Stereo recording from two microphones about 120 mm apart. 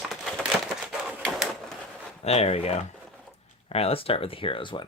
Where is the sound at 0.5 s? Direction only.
20° left (ahead or behind).